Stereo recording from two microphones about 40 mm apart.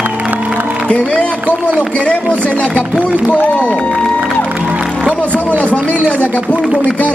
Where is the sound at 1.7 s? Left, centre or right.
Right.